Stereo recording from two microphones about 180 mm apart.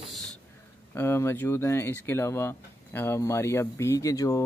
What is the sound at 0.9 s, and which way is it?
Speech, 15° left (ahead or behind).